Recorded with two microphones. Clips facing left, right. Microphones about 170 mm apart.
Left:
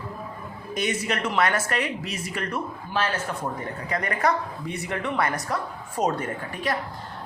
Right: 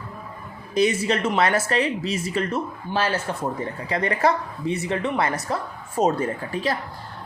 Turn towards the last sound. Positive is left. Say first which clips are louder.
# right 3 dB
turn(degrees=-30)  # may be behind; listen again after turning